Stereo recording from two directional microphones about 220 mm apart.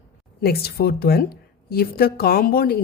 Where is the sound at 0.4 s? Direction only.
45° left (ahead or behind).